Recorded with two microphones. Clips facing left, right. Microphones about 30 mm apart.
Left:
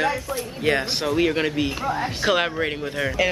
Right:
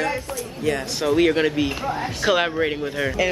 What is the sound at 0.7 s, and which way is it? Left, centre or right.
Speech, left.